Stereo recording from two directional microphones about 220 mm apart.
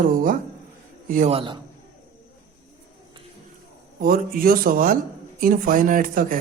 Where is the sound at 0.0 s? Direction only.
40° right (ahead or behind).